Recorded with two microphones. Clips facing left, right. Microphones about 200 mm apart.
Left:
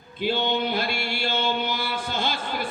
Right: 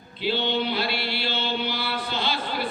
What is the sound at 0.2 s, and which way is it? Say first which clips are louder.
Chant: left 1 dB; 50° left (ahead or behind).